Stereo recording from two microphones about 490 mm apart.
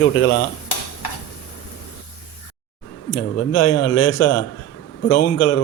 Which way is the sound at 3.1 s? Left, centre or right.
Left.